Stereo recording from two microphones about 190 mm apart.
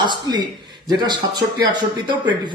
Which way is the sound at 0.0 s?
25° right (ahead or behind).